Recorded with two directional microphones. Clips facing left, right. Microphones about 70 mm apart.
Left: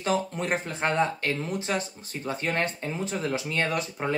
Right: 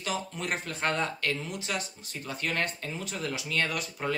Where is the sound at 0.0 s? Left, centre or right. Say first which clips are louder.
Left 6 dB; left.